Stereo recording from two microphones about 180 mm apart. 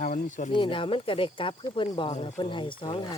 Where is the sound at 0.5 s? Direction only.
30° left (ahead or behind).